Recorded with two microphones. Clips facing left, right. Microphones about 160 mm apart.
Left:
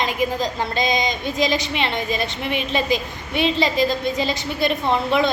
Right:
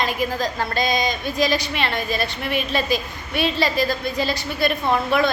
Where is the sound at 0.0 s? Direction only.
20° left (ahead or behind).